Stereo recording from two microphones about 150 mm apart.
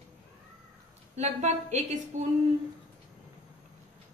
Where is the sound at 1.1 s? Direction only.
50° right (ahead or behind).